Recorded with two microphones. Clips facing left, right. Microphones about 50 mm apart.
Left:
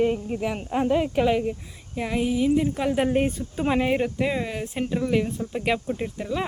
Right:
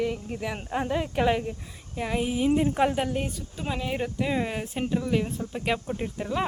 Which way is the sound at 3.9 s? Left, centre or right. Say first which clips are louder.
Left 4 dB; centre.